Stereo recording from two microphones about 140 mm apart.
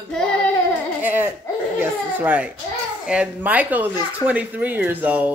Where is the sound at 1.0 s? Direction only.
15° right (ahead or behind).